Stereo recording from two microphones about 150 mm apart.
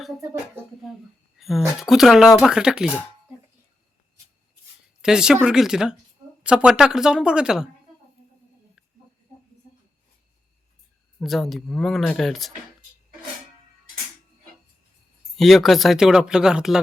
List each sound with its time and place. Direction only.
0.8 s speech: centre (ahead or behind)
5.0 s speech: 5° right (ahead or behind)
11.2 s speech: centre (ahead or behind)
15.4 s speech: centre (ahead or behind)